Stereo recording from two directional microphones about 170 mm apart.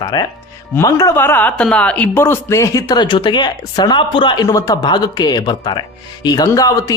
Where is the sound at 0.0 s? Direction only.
25° left (ahead or behind).